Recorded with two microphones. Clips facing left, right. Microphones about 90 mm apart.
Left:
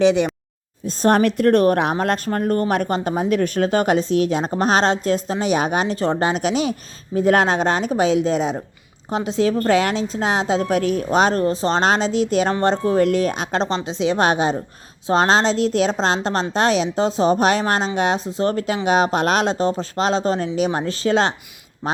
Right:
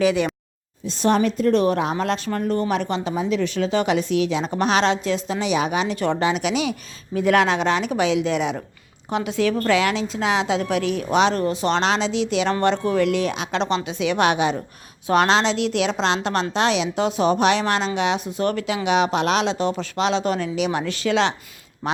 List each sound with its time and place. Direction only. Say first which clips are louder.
0.0 s speech: left 4 dB; 20° left (ahead or behind)
0.9 s a woman's voice: left 3 dB; 45° left (ahead or behind)
1.2 s speech: left 3 dB; 65° left (ahead or behind); by 21.3 s 40° left (ahead or behind)